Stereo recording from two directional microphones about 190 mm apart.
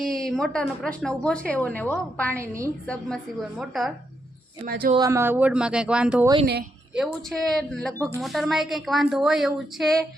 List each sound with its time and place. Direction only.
0.0 s a woman's voice: centre (ahead or behind)
2.4 s speech: 15° right (ahead or behind)
2.8 s a woman's voice: 5° left (ahead or behind)
4.6 s speech: 50° right (ahead or behind)
4.9 s speech: 15° right (ahead or behind)
6.4 s a woman's voice: 55° right (ahead or behind)
6.9 s a woman's voice: centre (ahead or behind)